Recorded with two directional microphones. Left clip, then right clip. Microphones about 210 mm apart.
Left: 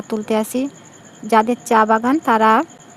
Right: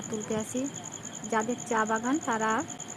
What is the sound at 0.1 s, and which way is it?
Speech, 50° left (ahead or behind).